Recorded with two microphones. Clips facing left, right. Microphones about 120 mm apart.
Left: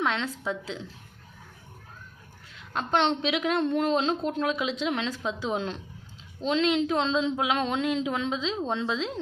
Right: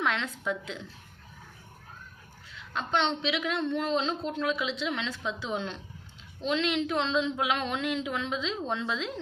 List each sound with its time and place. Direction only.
0.0 s a woman's voice: 30° left (ahead or behind)
2.7 s a woman's voice: 45° left (ahead or behind)
4.3 s a sound: 40° left (ahead or behind)